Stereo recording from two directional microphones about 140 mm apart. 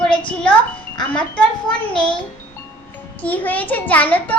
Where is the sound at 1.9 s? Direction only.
5° left (ahead or behind).